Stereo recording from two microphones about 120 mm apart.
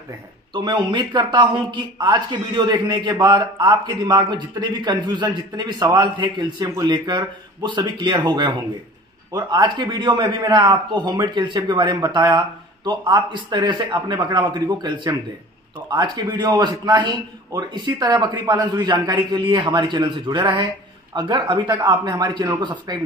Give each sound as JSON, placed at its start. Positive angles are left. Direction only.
{"t": 0.5, "sound": "speech", "side_deg": -35}